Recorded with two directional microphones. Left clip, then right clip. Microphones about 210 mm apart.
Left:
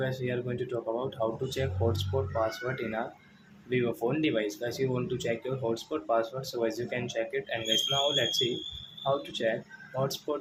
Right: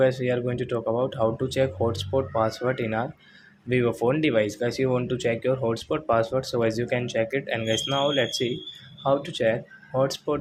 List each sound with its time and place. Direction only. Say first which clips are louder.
0.0 s speech: right 10 dB; 30° right (ahead or behind)